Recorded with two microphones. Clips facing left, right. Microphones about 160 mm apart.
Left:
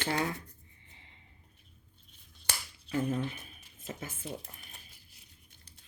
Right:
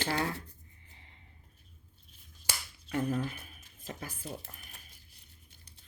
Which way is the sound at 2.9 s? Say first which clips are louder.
Even; 30° left (ahead or behind).